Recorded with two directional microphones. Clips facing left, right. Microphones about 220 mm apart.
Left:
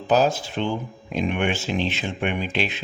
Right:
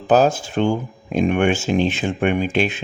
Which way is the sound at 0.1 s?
50° right (ahead or behind).